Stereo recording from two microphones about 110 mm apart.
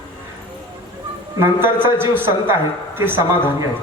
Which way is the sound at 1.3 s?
20° right (ahead or behind).